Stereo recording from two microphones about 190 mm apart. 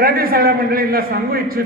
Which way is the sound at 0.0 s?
50° right (ahead or behind).